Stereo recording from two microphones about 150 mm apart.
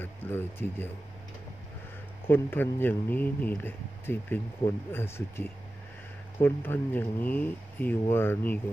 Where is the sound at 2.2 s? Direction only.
15° left (ahead or behind).